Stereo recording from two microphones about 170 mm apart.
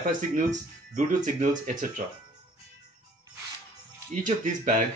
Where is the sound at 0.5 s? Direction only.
45° right (ahead or behind).